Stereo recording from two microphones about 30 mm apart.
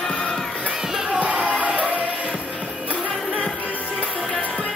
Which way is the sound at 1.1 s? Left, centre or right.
Right.